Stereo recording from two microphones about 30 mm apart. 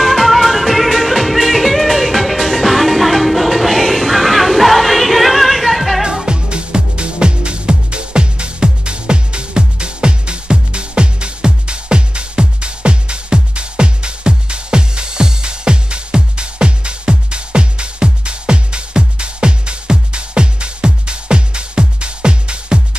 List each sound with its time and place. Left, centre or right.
0.0 s music: centre
6.2 s music: right